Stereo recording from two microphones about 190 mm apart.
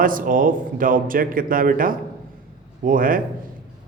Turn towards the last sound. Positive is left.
turn(degrees=-45)  # may be behind; listen again after turning